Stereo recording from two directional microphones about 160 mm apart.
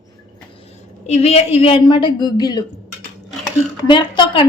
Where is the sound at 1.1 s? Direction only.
40° left (ahead or behind); by 2.6 s 25° left (ahead or behind).